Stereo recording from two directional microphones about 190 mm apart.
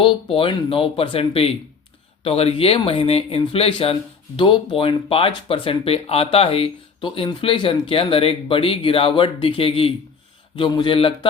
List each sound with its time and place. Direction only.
0.0 s speech: 25° left (ahead or behind)